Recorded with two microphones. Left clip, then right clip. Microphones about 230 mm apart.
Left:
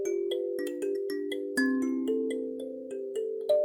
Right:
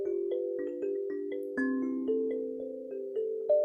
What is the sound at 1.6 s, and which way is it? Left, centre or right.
Music, left.